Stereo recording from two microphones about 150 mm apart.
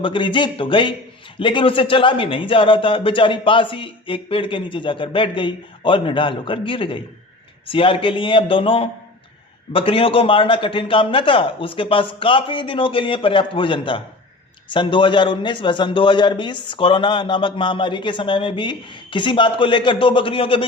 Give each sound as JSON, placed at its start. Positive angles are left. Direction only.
{"t": 0.0, "sound": "a man's voice", "side_deg": 35}